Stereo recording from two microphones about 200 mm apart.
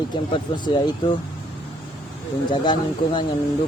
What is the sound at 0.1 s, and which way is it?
Speech, 25° left (ahead or behind).